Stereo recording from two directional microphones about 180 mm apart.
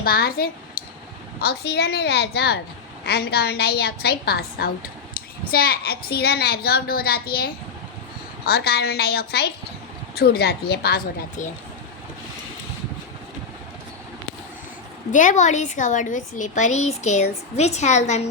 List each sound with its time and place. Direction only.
0.0 s a child's voice: 60° left (ahead or behind)
15.1 s a woman's voice: 45° left (ahead or behind)